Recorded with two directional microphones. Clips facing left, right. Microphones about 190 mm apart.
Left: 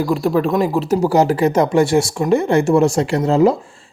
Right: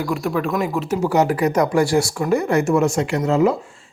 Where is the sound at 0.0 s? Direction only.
30° left (ahead or behind).